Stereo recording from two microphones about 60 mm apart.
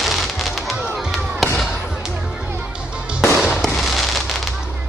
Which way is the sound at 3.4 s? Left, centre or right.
Centre.